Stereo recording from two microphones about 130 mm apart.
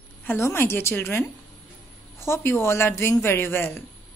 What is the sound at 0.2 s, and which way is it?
A woman's voice, 15° left (ahead or behind).